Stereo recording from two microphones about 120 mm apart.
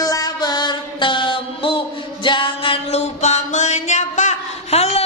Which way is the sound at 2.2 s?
45° left (ahead or behind).